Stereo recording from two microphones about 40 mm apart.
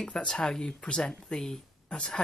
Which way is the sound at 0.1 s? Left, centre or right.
Left.